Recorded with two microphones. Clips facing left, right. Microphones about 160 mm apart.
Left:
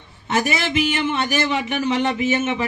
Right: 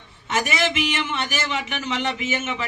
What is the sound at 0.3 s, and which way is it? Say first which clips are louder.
A man's voice: left 2 dB; 35° left (ahead or behind).